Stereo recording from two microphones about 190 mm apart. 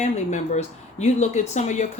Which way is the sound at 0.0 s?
35° left (ahead or behind).